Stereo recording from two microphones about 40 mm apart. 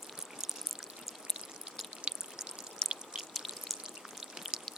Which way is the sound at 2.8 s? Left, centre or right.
Centre.